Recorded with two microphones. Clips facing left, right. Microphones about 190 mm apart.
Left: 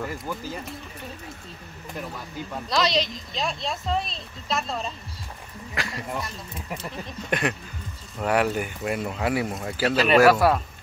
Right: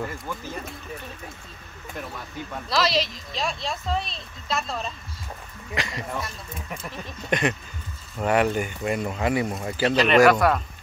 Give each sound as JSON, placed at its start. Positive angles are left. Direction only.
{"t": 2.0, "sound": "speech", "side_deg": 5}
{"t": 7.2, "sound": "speech", "side_deg": 0}